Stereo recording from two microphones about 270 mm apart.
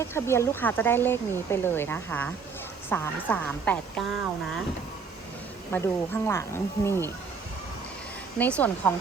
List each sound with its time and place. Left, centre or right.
0.0 s a woman's voice: centre
5.7 s speech: centre
8.4 s a woman's voice: centre